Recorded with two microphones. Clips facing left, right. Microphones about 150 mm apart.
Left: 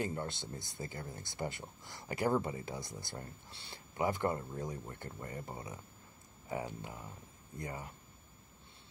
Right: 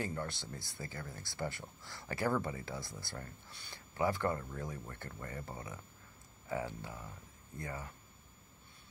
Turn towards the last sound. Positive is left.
turn(degrees=20)  # may be behind; listen again after turning